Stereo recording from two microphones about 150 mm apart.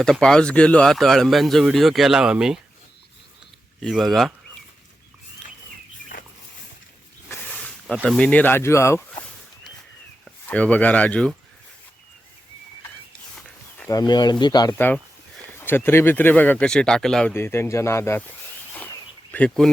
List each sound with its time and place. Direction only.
0.0 s speech: 5° left (ahead or behind)
3.8 s speech: centre (ahead or behind)
7.3 s snake: 10° left (ahead or behind)
8.0 s speech: 5° left (ahead or behind)
10.5 s speech: 10° left (ahead or behind)
13.9 s speech: 25° left (ahead or behind)
15.5 s speech: 15° left (ahead or behind)
17.3 s speech: 15° left (ahead or behind)
18.7 s a sound: 10° left (ahead or behind)